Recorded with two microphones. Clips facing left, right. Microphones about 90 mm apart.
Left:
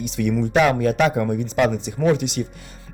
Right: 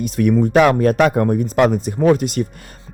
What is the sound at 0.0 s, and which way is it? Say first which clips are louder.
Speech: right 6 dB; 45° right (ahead or behind).